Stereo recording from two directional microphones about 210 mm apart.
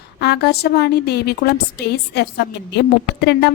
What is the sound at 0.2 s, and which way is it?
A woman's voice, 50° left (ahead or behind).